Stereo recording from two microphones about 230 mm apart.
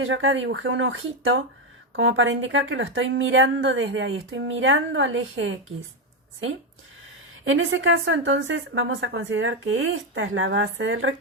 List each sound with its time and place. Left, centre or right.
0.0 s a woman's voice: right
7.4 s a woman's voice: right